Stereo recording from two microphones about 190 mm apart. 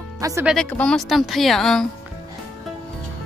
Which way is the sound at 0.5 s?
5° left (ahead or behind).